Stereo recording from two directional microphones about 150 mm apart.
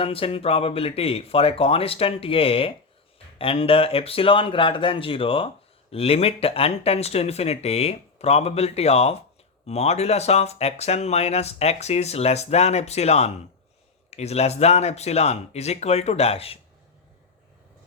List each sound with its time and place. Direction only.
0.0 s speech: 40° left (ahead or behind)